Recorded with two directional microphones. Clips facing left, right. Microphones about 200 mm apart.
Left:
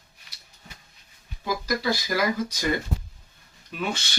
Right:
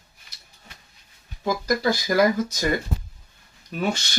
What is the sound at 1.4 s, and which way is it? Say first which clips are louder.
Speech: right 4 dB; 50° right (ahead or behind).